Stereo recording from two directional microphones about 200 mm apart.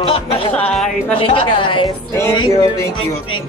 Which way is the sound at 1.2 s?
25° left (ahead or behind).